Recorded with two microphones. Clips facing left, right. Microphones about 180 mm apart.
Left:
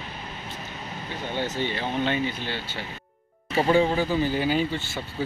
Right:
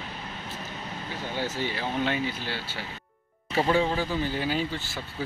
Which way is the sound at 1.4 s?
5° right (ahead or behind).